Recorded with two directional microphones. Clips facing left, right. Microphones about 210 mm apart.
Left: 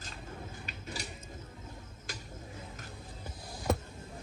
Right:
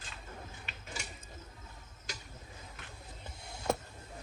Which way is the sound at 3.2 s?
25° right (ahead or behind).